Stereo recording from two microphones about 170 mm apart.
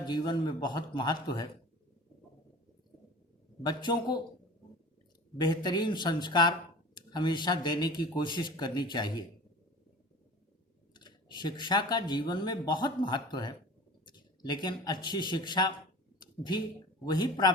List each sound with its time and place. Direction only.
0.0 s speech: 25° left (ahead or behind)
3.6 s speech: 25° left (ahead or behind)
5.4 s speech: 25° left (ahead or behind)
10.9 s a man's voice: 25° left (ahead or behind)
17.1 s speech: 25° left (ahead or behind)